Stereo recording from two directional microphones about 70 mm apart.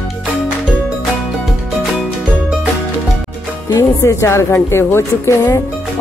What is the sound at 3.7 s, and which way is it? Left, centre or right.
Speech, left.